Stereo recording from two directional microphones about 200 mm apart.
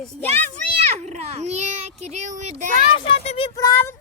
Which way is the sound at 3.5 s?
15° left (ahead or behind).